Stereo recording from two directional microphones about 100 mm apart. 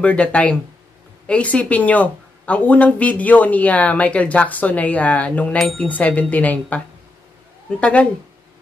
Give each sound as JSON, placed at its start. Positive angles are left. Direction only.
{"t": 0.0, "sound": "speech", "side_deg": 15}
{"t": 5.6, "sound": "speech", "side_deg": 5}
{"t": 5.9, "sound": "speech", "side_deg": 15}
{"t": 7.8, "sound": "speech", "side_deg": 15}